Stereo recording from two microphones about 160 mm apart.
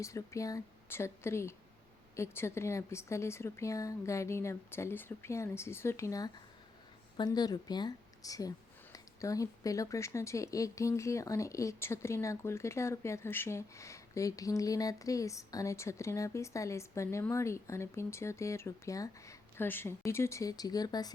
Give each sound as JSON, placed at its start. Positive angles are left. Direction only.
{"t": 0.0, "sound": "speech", "side_deg": 20}